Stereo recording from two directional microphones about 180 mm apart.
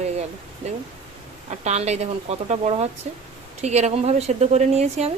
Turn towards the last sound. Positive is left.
turn(degrees=-40)  # may be behind; listen again after turning